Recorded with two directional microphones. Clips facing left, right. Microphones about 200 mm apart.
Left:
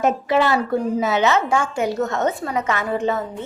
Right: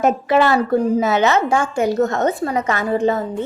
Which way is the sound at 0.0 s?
50° right (ahead or behind).